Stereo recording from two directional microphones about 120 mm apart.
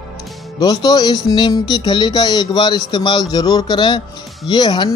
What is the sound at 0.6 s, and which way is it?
Speech, 35° left (ahead or behind).